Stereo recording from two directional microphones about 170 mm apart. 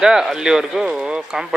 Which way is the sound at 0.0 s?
5° right (ahead or behind).